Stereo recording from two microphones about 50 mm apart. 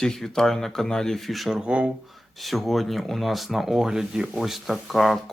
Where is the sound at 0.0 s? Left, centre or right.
Centre.